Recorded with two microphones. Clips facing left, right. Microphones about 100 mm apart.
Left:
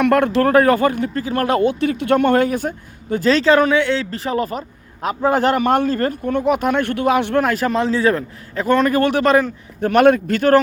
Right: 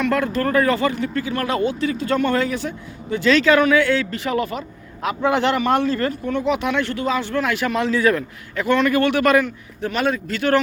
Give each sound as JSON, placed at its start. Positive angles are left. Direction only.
{"t": 0.0, "sound": "speech", "side_deg": 60}
{"t": 4.1, "sound": "a man's voice", "side_deg": 35}
{"t": 7.4, "sound": "a man's voice", "side_deg": 40}
{"t": 9.8, "sound": "speech", "side_deg": 55}